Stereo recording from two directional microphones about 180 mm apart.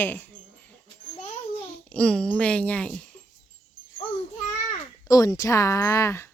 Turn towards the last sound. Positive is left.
turn(degrees=15)  # may be behind; listen again after turning